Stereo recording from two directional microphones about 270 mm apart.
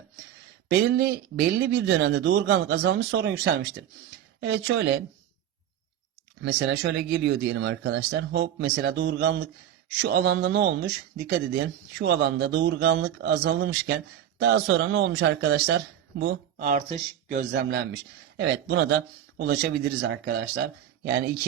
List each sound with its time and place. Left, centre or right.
0.7 s speech: right
6.4 s speech: right
17.7 s speech: right